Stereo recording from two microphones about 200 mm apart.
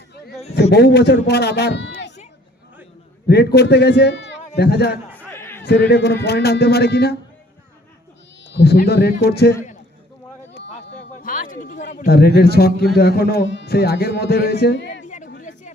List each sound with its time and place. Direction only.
0.7 s a man's voice: 55° left (ahead or behind)
3.2 s a man's voice: 55° left (ahead or behind)
5.1 s a sound: 10° left (ahead or behind)
5.6 s a man's voice: 55° left (ahead or behind)
8.5 s a man's voice: 55° left (ahead or behind)
11.2 s a man's voice: 45° left (ahead or behind); by 15.0 s 60° left (ahead or behind)
15.0 s chatter: 40° left (ahead or behind)